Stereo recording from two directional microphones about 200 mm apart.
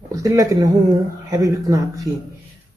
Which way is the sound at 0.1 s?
15° right (ahead or behind).